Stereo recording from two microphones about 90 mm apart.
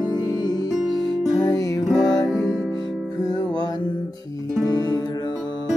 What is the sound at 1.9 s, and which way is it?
Music, 5° left (ahead or behind).